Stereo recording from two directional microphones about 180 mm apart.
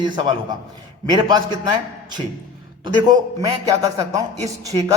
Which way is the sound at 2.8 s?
20° right (ahead or behind).